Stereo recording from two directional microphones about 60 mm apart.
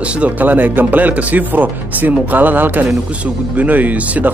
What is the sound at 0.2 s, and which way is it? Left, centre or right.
Speech, right.